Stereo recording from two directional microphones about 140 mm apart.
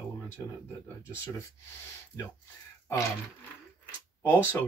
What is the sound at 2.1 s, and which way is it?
Speech, 20° left (ahead or behind).